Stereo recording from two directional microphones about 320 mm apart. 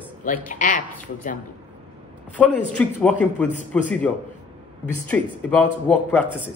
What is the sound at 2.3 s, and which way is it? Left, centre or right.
A man's voice, centre.